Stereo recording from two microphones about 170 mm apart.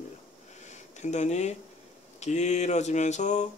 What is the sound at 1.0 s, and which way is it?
Speech, 40° left (ahead or behind).